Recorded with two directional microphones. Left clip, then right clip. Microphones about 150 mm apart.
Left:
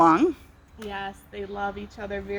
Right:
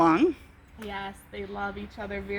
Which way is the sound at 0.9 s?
65° right (ahead or behind).